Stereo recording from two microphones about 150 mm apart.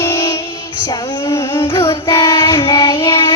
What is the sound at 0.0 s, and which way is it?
Music, 20° left (ahead or behind).